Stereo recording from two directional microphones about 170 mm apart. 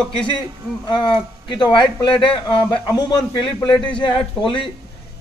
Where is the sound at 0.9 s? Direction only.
25° left (ahead or behind).